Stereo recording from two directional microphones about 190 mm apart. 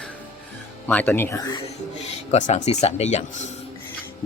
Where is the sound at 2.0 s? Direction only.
35° left (ahead or behind).